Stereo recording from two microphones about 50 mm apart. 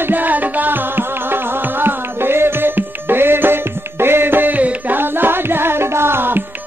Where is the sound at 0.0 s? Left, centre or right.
Right.